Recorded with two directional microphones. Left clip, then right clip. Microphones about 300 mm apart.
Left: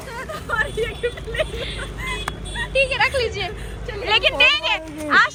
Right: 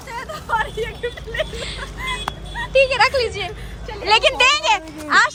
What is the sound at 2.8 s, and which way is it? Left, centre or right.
Speech, right.